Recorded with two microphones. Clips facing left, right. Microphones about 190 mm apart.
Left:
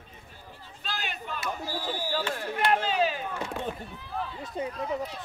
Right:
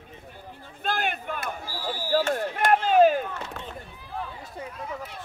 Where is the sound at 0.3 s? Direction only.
55° right (ahead or behind).